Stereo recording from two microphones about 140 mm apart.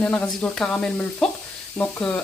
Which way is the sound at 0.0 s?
5° left (ahead or behind).